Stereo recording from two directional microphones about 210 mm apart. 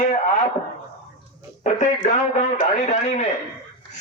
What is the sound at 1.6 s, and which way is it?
Speech, 30° left (ahead or behind).